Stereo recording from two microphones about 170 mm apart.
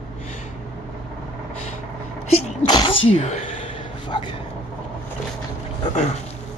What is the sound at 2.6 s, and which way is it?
Sneeze, 25° left (ahead or behind).